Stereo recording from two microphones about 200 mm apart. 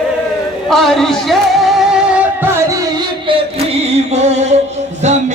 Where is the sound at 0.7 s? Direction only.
Centre (ahead or behind).